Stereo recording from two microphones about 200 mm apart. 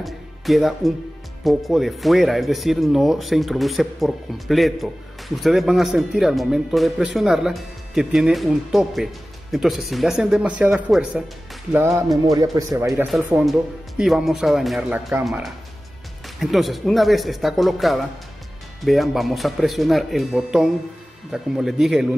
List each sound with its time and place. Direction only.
0.0 s speech: centre (ahead or behind)